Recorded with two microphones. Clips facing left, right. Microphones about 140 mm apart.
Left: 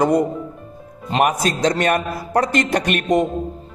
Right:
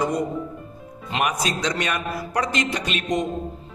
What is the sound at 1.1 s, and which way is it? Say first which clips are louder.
Music: left 6 dB; 45° left (ahead or behind).